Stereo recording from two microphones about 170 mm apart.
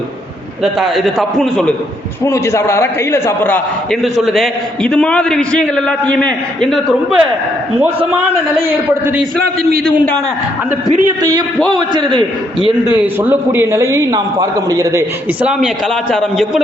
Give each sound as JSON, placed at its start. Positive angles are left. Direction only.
{"t": 0.6, "sound": "a man's voice", "side_deg": 0}
{"t": 2.2, "sound": "a man's voice", "side_deg": 15}
{"t": 4.0, "sound": "a man's voice", "side_deg": 0}
{"t": 11.2, "sound": "a man's voice", "side_deg": -25}
{"t": 13.1, "sound": "a man's voice", "side_deg": -15}
{"t": 16.1, "sound": "a man's voice", "side_deg": 0}